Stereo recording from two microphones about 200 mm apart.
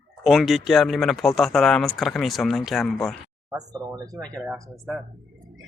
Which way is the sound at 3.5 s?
20° right (ahead or behind).